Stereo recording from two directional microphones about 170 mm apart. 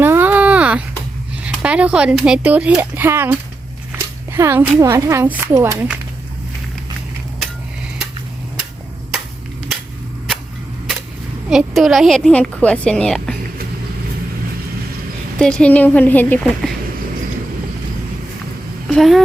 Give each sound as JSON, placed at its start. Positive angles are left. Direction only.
{"t": 0.0, "sound": "a sound", "side_deg": -10}
{"t": 1.4, "sound": "speech", "side_deg": -5}
{"t": 3.9, "sound": "a sound", "side_deg": -15}
{"t": 4.8, "sound": "speech", "side_deg": -15}
{"t": 11.4, "sound": "a woman's voice", "side_deg": 0}
{"t": 15.4, "sound": "a woman's voice", "side_deg": 5}
{"t": 18.9, "sound": "speech", "side_deg": 0}